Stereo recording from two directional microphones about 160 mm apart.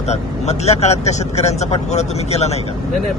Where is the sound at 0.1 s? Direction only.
40° left (ahead or behind).